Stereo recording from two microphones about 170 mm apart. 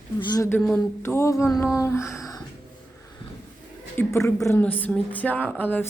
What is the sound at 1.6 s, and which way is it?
Music, 20° left (ahead or behind).